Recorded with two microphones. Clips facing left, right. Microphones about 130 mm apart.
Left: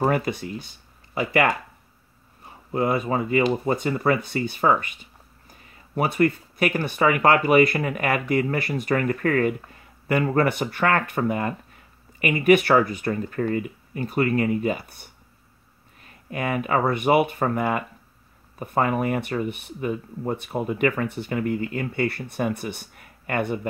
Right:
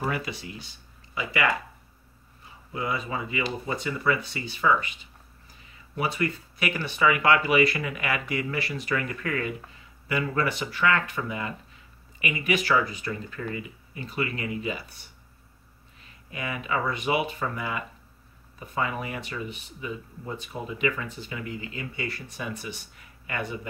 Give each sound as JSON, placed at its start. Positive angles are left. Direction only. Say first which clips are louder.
{"t": 0.0, "sound": "speech", "louder": "left 8 dB", "side_deg": 50}